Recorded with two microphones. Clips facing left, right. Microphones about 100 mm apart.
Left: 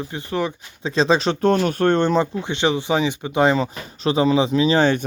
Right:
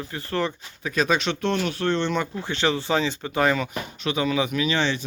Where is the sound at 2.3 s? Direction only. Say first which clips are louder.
Left 4 dB; 20° left (ahead or behind).